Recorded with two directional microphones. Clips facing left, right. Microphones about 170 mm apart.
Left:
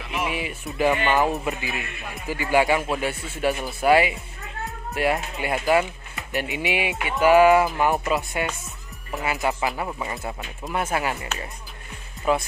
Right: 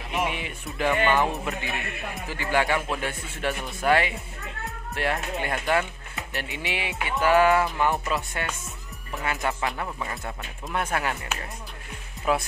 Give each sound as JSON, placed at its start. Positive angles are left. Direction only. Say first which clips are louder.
{"t": 0.3, "sound": "music", "louder": "left 4 dB", "side_deg": 5}
{"t": 1.1, "sound": "a man's voice", "louder": "left 3 dB", "side_deg": 5}
{"t": 2.3, "sound": "speech", "louder": "left 5 dB", "side_deg": 15}
{"t": 12.3, "sound": "a man's voice", "louder": "left 2 dB", "side_deg": 0}